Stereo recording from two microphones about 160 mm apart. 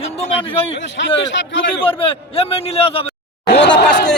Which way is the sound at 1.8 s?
35° left (ahead or behind).